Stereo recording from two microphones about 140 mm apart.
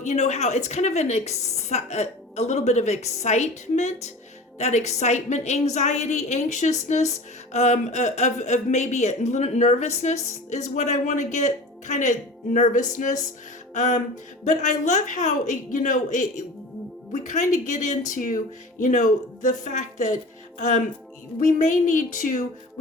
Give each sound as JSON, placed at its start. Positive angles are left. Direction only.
{"t": 0.0, "sound": "a woman's voice", "side_deg": 55}
{"t": 18.1, "sound": "music", "side_deg": 75}
{"t": 18.8, "sound": "a woman's voice", "side_deg": 65}
{"t": 21.3, "sound": "a woman's voice", "side_deg": 60}